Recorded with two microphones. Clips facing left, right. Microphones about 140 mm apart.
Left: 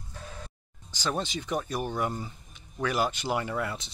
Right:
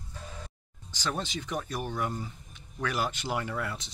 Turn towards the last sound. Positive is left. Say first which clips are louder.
# left 3 dB
turn(degrees=15)  # may be behind; listen again after turning